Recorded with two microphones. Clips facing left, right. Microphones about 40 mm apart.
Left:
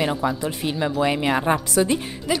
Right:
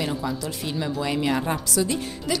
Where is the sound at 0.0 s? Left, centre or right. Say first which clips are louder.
Left 5 dB; left.